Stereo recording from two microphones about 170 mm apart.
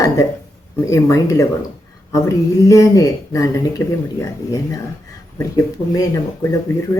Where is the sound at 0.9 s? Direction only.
20° left (ahead or behind).